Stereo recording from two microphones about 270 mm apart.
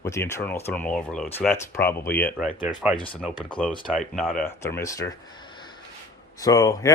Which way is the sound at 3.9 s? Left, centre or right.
Centre.